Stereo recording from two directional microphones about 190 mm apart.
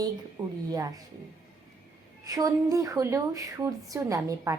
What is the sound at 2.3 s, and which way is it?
A woman's voice, 20° right (ahead or behind).